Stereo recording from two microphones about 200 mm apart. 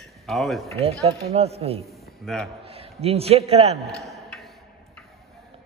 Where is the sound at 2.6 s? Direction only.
30° right (ahead or behind).